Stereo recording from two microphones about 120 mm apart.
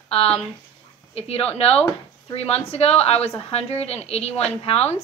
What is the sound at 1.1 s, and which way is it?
A woman's voice, 55° left (ahead or behind).